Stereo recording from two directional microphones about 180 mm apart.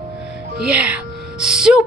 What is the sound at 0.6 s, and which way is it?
Gasp, 5° right (ahead or behind).